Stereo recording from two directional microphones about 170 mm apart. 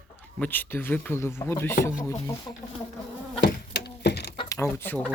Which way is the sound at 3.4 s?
75° left (ahead or behind).